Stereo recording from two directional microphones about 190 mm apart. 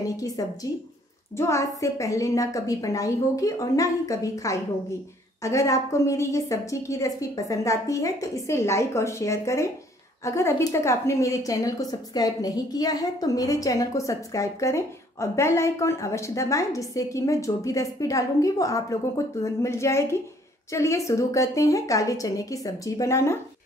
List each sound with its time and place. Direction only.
0.0 s a woman's voice: 20° left (ahead or behind)